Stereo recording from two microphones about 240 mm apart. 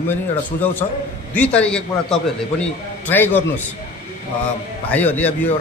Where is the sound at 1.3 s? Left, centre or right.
Centre.